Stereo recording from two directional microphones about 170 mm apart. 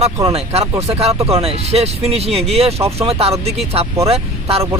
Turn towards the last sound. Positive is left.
turn(degrees=-35)  # may be behind; listen again after turning